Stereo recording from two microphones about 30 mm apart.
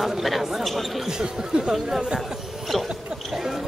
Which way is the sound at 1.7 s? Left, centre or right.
Centre.